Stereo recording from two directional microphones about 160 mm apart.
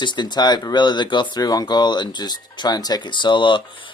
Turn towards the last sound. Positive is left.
turn(degrees=30)  # may be behind; listen again after turning